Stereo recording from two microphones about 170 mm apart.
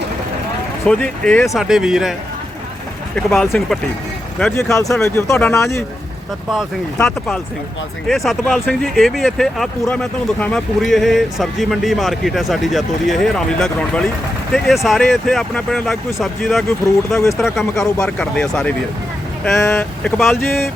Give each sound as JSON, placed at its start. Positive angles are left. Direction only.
{"t": 0.9, "sound": "speech", "side_deg": 5}
{"t": 1.5, "sound": "speech", "side_deg": -5}
{"t": 3.2, "sound": "speech", "side_deg": 0}
{"t": 4.5, "sound": "speech", "side_deg": 20}
{"t": 6.5, "sound": "speech", "side_deg": 0}
{"t": 19.5, "sound": "speech", "side_deg": 15}